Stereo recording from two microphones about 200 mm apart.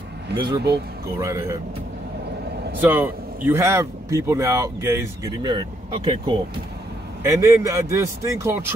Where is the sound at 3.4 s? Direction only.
10° right (ahead or behind).